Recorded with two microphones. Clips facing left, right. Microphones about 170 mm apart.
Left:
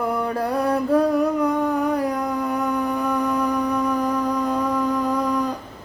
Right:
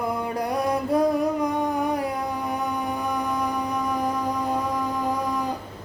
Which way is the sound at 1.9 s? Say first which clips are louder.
Left 4 dB; 10° right (ahead or behind).